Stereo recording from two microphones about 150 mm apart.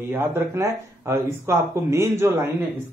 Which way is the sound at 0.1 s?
15° right (ahead or behind).